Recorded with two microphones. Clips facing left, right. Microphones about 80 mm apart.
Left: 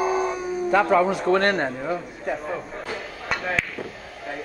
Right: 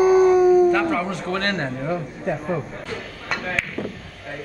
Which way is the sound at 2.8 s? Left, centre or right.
Centre.